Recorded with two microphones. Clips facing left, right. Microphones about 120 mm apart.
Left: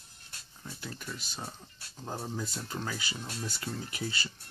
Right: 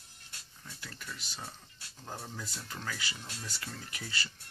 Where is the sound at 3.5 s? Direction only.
25° left (ahead or behind).